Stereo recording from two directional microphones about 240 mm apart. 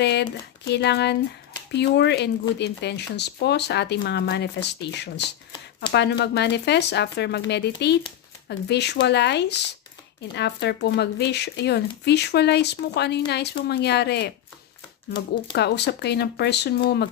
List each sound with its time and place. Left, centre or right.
0.0 s speech: left
15.5 s speech: left